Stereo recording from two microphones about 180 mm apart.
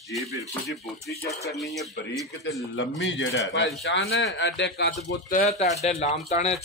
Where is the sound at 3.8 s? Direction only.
70° left (ahead or behind).